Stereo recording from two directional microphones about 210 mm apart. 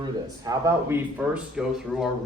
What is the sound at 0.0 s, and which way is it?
Speech, 15° right (ahead or behind).